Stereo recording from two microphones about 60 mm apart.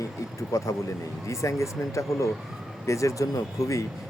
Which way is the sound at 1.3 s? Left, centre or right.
Left.